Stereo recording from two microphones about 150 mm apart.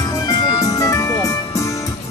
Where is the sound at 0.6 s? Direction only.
20° left (ahead or behind).